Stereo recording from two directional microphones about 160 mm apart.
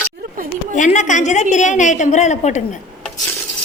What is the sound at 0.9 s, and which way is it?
A woman's voice, 50° left (ahead or behind).